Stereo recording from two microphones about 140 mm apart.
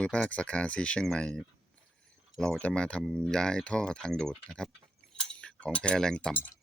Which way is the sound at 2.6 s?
10° left (ahead or behind).